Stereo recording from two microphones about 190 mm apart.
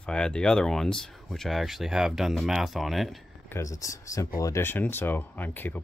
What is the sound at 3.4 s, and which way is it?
Speech, 15° left (ahead or behind).